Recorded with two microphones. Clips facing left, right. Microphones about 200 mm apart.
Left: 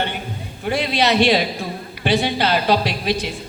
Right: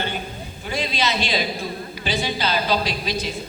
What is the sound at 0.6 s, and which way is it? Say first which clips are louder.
A woman's voice: left 5 dB; 65° left (ahead or behind).